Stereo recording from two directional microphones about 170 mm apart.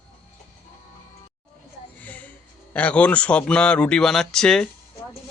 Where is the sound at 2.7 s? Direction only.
10° left (ahead or behind).